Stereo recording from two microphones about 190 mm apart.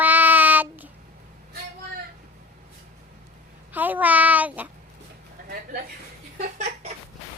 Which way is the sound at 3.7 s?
10° right (ahead or behind).